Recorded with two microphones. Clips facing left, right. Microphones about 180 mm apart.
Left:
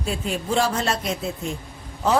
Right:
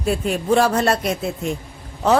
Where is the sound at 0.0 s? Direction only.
60° right (ahead or behind).